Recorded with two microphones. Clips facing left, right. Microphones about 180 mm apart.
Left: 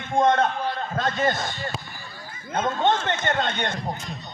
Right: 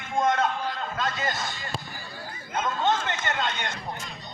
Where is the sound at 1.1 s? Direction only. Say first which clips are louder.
Left 6 dB; 55° left (ahead or behind).